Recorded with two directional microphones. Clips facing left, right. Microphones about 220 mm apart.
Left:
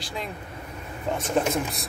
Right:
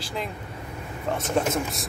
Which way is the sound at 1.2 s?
Centre (ahead or behind).